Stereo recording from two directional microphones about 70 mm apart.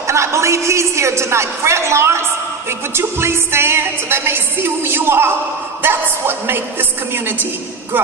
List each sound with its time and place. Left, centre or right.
0.1 s a woman's voice: right
2.6 s music: right